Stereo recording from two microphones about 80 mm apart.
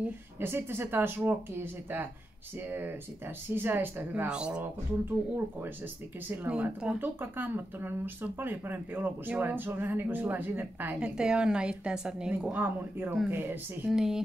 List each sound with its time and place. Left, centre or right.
0.0 s speech: right
4.3 s a woman's voice: centre
6.3 s a woman's voice: centre
7.0 s speech: right
11.0 s a woman's voice: centre
12.5 s speech: right
13.9 s speech: centre